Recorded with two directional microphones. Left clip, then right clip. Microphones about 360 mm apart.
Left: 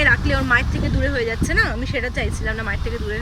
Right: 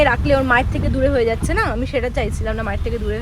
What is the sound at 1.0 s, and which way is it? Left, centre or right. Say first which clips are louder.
Speech: right 6 dB; right.